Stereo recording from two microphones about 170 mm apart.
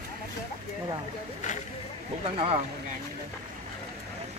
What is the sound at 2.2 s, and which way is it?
Speech, 35° right (ahead or behind).